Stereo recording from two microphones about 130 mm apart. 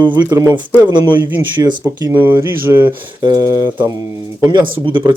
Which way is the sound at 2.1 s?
15° right (ahead or behind).